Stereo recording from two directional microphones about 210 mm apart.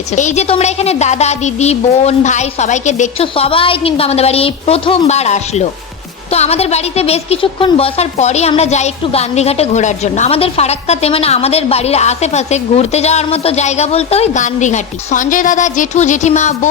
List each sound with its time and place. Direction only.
0.2 s a woman's voice: 35° left (ahead or behind)